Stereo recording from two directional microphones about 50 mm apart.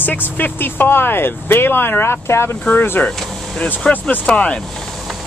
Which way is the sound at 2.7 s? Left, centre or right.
Left.